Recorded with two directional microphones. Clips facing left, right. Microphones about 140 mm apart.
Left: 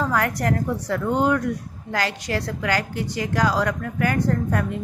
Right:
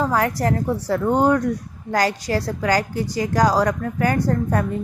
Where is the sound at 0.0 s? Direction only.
25° right (ahead or behind).